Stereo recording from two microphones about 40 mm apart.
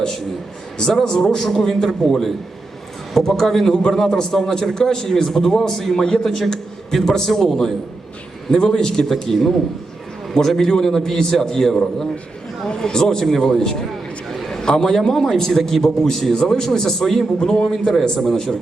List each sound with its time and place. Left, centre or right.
1.0 s a man's voice: centre
6.5 s a man's voice: centre
14.3 s a sound: centre
15.0 s a man's voice: centre